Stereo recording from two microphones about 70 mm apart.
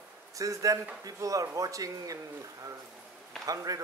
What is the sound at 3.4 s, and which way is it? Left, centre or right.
Speech, right.